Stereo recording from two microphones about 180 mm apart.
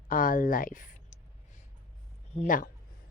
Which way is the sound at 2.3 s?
45° left (ahead or behind).